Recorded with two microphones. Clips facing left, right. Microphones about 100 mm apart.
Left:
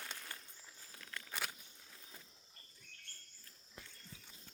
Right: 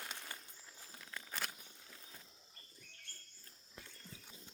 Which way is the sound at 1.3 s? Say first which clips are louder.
Even; centre (ahead or behind).